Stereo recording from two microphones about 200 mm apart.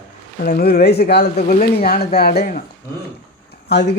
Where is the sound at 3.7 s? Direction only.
60° left (ahead or behind).